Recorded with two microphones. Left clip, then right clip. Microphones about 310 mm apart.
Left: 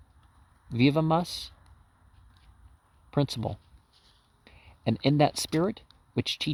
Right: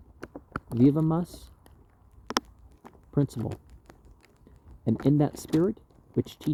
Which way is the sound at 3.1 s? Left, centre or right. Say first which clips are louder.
Even; left.